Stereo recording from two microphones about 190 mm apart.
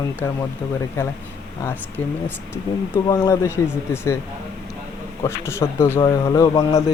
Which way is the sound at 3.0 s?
15° left (ahead or behind).